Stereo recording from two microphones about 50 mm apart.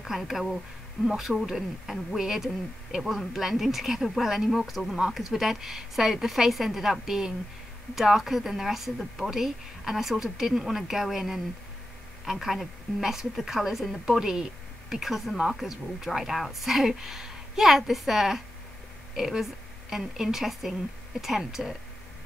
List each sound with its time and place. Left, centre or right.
0.0 s a woman's voice: centre